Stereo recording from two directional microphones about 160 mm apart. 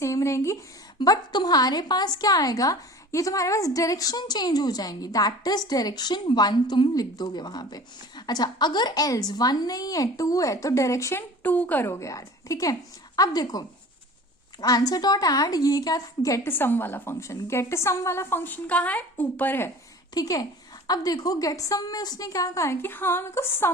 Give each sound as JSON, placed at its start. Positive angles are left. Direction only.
{"t": 0.0, "sound": "a woman's voice", "side_deg": 20}
{"t": 20.1, "sound": "a woman's voice", "side_deg": 25}